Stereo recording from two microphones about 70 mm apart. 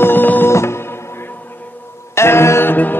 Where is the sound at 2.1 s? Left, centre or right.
Left.